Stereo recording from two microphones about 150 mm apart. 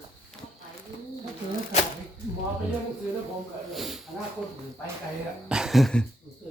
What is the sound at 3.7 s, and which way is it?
Snake, centre (ahead or behind).